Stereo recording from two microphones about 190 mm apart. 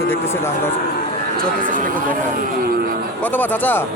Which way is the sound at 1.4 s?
45° right (ahead or behind).